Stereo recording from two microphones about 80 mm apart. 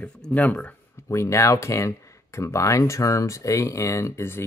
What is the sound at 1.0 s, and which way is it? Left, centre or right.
Speech, left.